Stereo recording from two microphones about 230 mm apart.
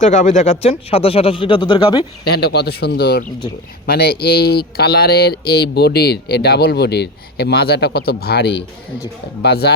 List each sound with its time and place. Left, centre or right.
0.0 s speech: left
2.2 s speech: left